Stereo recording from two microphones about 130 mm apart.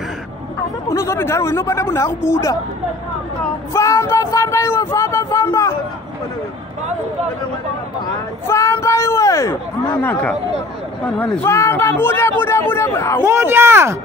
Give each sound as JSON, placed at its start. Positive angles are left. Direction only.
{"t": 0.8, "sound": "speech", "side_deg": 20}
{"t": 3.7, "sound": "speech", "side_deg": 25}
{"t": 8.5, "sound": "speech", "side_deg": 20}
{"t": 11.4, "sound": "speech", "side_deg": 20}
{"t": 13.2, "sound": "speech", "side_deg": -20}